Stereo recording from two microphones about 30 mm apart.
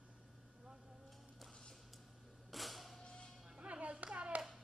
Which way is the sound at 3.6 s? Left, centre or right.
Right.